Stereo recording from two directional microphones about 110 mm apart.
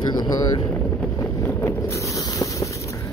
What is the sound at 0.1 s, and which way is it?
Speech, 40° left (ahead or behind).